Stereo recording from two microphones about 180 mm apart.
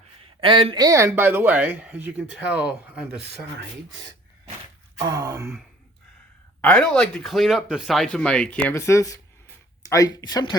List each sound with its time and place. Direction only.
0.2 s speech: 30° right (ahead or behind); by 3.2 s 10° right (ahead or behind)
4.9 s gasp: 20° right (ahead or behind)
6.6 s speech: 5° left (ahead or behind); by 10.6 s 20° left (ahead or behind)